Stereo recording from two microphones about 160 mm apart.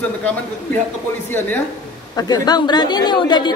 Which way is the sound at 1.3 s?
10° left (ahead or behind).